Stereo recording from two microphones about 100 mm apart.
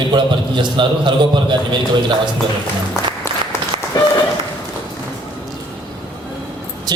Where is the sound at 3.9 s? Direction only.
45° left (ahead or behind).